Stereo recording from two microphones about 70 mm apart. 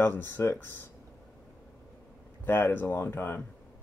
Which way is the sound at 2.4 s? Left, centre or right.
Left.